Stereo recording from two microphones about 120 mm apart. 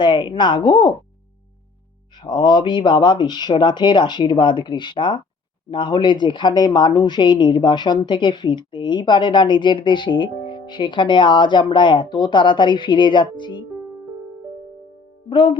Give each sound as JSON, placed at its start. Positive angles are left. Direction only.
{"t": 0.0, "sound": "a woman's voice", "side_deg": 40}
{"t": 2.1, "sound": "a woman's voice", "side_deg": 40}
{"t": 15.3, "sound": "a woman's voice", "side_deg": 40}